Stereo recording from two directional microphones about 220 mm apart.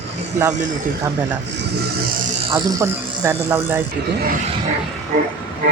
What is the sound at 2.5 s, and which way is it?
A man's voice, 10° right (ahead or behind).